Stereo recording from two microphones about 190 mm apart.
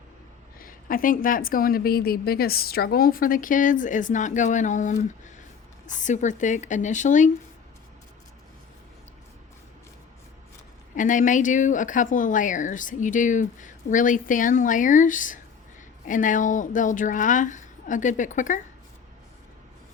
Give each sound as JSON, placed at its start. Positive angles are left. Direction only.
{"t": 0.6, "sound": "speech", "side_deg": 45}
{"t": 10.9, "sound": "speech", "side_deg": 40}